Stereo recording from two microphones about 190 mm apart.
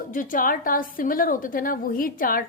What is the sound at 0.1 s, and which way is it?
A woman's voice, 45° left (ahead or behind).